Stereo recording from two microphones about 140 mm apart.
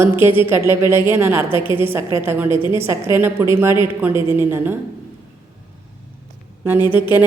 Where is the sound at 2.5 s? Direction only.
35° left (ahead or behind).